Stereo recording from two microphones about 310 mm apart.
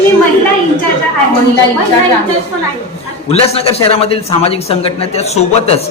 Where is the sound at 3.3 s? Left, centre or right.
Centre.